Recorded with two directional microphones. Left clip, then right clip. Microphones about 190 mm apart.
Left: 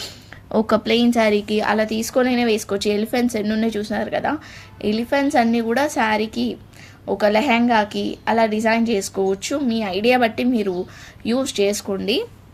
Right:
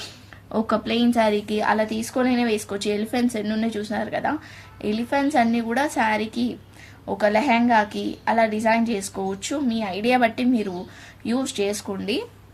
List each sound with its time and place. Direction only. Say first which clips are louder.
0.5 s a woman's voice: left 5 dB; 40° left (ahead or behind)